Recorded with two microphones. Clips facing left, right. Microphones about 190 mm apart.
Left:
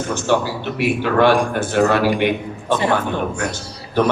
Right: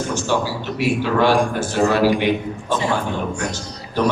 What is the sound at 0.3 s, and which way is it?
A man's voice, 60° left (ahead or behind).